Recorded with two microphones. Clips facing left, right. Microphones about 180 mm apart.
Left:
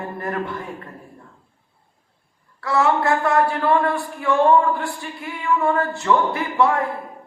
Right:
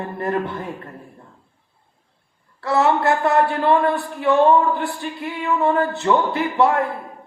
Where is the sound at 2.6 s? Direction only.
25° right (ahead or behind).